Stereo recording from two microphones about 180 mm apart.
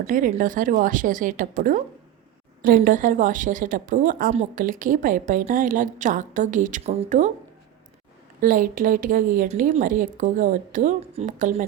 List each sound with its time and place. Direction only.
0.0 s a woman's voice: 50° right (ahead or behind)
8.4 s a woman's voice: 50° right (ahead or behind)